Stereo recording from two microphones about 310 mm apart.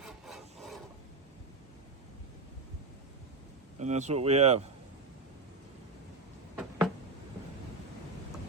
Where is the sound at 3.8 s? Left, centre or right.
Right.